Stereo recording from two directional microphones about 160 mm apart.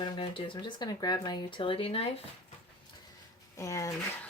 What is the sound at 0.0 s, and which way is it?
Speech, 30° left (ahead or behind).